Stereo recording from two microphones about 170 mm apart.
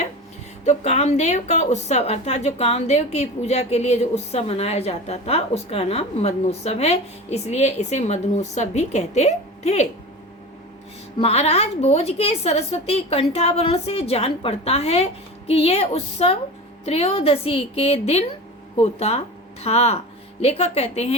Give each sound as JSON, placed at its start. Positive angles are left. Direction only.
{"t": 0.6, "sound": "a woman's voice", "side_deg": 40}
{"t": 11.2, "sound": "a woman's voice", "side_deg": 35}